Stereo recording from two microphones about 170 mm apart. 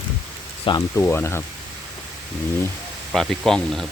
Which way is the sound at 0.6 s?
25° left (ahead or behind).